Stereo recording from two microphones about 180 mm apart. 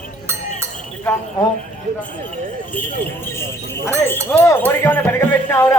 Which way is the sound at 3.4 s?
15° left (ahead or behind).